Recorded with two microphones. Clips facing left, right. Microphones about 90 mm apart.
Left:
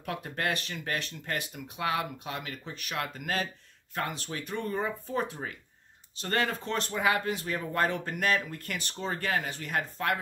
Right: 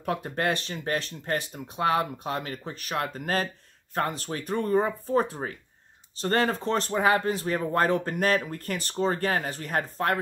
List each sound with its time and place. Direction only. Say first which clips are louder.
0.0 s speech: right 5 dB; 35° right (ahead or behind)